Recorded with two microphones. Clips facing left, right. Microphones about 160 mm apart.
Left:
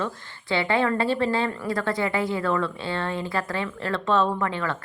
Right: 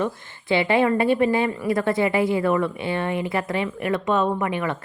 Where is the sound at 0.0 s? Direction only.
20° right (ahead or behind).